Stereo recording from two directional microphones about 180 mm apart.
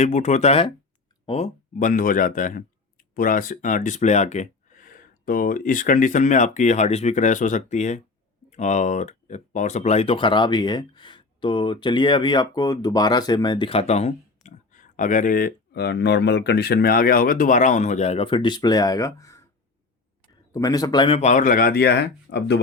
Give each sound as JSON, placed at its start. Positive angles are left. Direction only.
{"t": 0.0, "sound": "speech", "side_deg": 40}
{"t": 1.8, "sound": "speech", "side_deg": 50}
{"t": 20.5, "sound": "speech", "side_deg": 20}
{"t": 21.2, "sound": "speech", "side_deg": 40}